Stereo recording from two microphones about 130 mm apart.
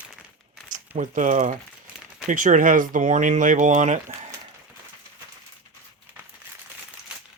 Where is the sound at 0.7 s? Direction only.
80° right.